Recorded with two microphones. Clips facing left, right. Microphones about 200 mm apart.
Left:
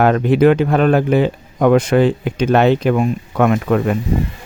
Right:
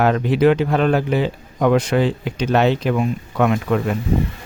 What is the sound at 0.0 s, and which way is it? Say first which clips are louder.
Speech: left 3 dB; 55° left (ahead or behind).